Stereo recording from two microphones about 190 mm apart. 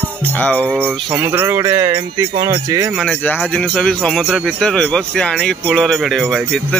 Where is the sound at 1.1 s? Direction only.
10° right (ahead or behind).